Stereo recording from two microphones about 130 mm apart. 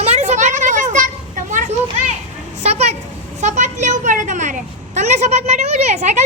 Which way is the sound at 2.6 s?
55° right (ahead or behind).